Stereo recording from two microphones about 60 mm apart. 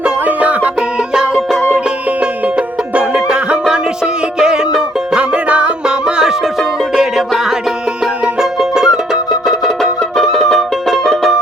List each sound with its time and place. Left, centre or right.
0.0 s music: right
0.8 s music: centre
3.7 s music: centre